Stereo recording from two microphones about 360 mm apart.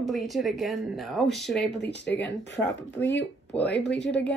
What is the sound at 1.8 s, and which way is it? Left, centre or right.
Speech, left.